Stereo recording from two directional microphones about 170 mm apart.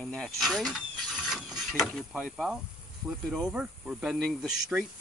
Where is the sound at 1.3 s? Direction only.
Centre (ahead or behind).